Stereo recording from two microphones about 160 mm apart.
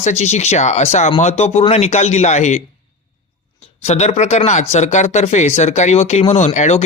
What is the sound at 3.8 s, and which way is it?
Speech, 40° left (ahead or behind).